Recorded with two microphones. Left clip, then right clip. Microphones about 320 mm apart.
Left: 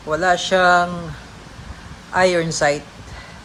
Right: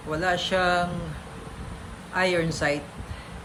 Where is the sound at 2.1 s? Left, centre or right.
Centre.